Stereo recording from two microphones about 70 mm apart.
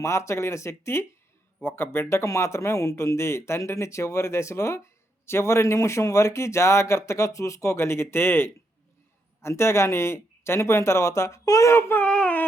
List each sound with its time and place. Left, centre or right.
0.0 s speech: left
11.7 s speech: left
12.0 s baby cry: centre